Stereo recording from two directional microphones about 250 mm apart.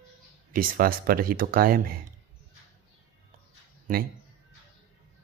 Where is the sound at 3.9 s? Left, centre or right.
Right.